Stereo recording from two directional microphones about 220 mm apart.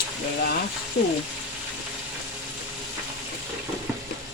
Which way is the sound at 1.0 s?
45° left (ahead or behind).